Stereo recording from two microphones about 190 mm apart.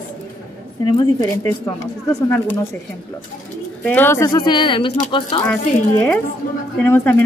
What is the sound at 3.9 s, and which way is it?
Speech, 10° left (ahead or behind).